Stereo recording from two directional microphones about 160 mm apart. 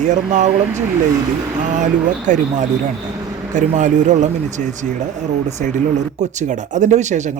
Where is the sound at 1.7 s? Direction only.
50° right (ahead or behind).